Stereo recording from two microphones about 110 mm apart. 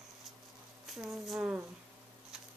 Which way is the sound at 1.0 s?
Centre (ahead or behind).